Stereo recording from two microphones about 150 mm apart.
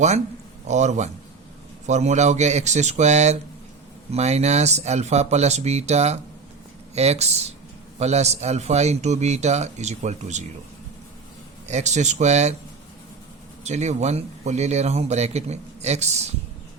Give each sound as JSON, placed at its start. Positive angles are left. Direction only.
{"t": 0.7, "sound": "speech", "side_deg": -50}
{"t": 11.7, "sound": "speech", "side_deg": -50}
{"t": 13.7, "sound": "speech", "side_deg": -50}